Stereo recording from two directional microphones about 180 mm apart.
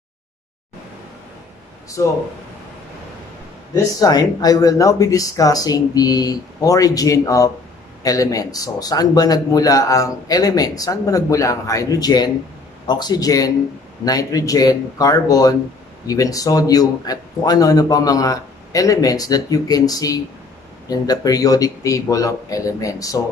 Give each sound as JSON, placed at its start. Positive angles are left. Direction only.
{"t": 2.0, "sound": "speech", "side_deg": 20}
{"t": 3.7, "sound": "a man's voice", "side_deg": 20}